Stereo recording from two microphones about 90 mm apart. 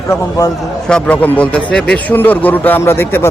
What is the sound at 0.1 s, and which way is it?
Speech, 40° left (ahead or behind).